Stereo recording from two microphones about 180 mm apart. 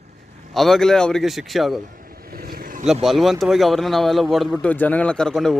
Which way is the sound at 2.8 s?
Centre (ahead or behind).